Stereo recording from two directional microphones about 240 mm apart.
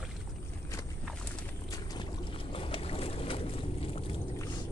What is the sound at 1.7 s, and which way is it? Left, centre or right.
Boat, centre.